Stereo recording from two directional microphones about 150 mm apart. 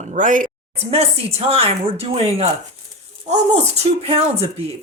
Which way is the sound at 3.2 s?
50° right (ahead or behind).